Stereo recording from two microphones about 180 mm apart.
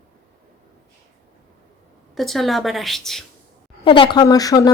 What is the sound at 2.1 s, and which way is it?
A woman's voice, centre (ahead or behind).